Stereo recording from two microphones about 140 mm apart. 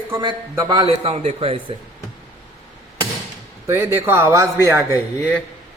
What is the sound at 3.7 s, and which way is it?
A man's voice, 20° right (ahead or behind).